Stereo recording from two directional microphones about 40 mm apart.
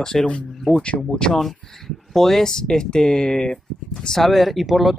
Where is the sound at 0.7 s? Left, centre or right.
Centre.